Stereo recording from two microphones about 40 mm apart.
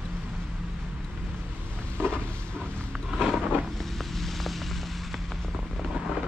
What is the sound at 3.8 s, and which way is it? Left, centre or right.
Vehicle, centre.